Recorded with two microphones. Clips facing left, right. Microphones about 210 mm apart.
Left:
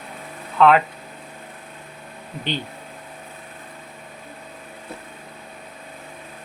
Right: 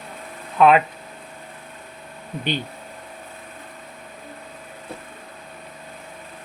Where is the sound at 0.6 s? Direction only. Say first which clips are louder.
Even; 15° right (ahead or behind).